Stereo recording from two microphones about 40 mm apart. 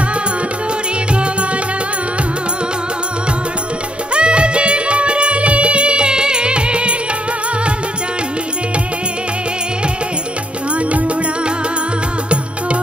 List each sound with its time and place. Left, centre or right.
4.1 s music: right